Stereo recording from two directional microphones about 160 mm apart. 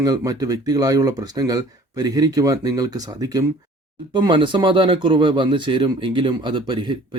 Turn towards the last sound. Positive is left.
turn(degrees=-30)  # may be behind; listen again after turning